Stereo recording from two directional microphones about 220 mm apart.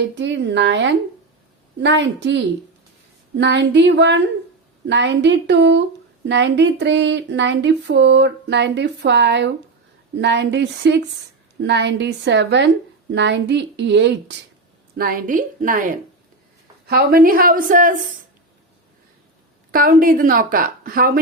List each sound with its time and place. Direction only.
0.2 s a sound: 55° right (ahead or behind)
14.9 s a woman's voice: 40° right (ahead or behind)
19.7 s a woman's voice: 40° right (ahead or behind)